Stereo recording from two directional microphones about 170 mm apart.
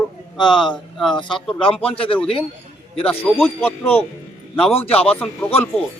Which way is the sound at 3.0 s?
10° left (ahead or behind).